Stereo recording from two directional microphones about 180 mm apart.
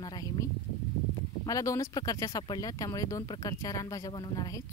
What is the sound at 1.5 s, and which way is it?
Speech, 20° left (ahead or behind).